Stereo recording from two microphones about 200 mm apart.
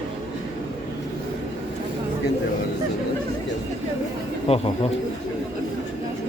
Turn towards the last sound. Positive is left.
turn(degrees=30)  # may be behind; listen again after turning